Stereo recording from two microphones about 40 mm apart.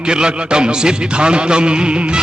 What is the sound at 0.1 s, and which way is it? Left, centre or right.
Music, right.